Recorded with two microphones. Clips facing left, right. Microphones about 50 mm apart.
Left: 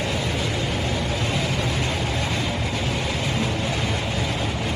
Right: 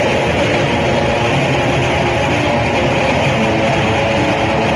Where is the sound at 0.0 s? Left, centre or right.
Right.